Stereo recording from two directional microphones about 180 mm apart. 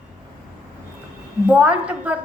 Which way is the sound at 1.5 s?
5° right (ahead or behind).